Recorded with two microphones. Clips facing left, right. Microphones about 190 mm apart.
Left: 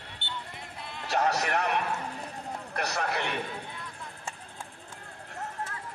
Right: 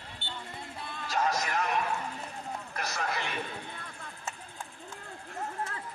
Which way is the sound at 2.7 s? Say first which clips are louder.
Left 4 dB; 65° left (ahead or behind).